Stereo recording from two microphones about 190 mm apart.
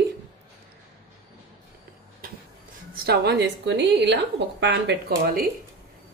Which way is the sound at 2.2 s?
50° right (ahead or behind).